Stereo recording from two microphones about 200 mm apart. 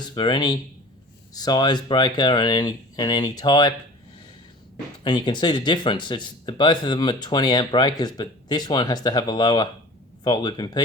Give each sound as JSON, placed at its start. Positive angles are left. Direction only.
{"t": 0.0, "sound": "speech", "side_deg": 20}
{"t": 5.0, "sound": "speech", "side_deg": 20}